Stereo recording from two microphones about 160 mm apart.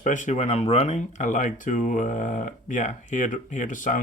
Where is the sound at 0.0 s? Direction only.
50° left (ahead or behind).